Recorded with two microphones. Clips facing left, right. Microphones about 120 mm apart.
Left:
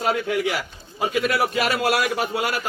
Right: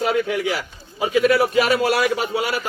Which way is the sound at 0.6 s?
50° right (ahead or behind).